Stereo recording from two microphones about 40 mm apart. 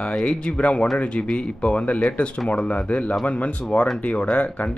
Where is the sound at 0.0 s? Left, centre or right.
Left.